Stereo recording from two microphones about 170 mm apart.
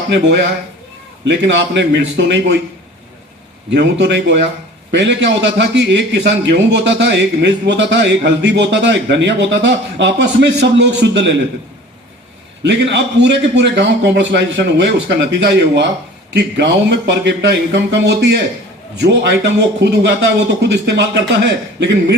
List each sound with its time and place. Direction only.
0.1 s a man's voice: 90° right
3.7 s a man's voice: 85° right
12.6 s a man's voice: 90° right